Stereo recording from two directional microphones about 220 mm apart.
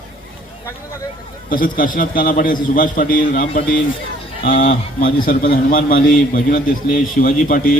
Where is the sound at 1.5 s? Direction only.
40° left (ahead or behind).